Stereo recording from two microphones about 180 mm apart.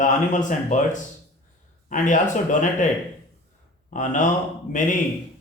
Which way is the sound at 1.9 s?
45° left (ahead or behind).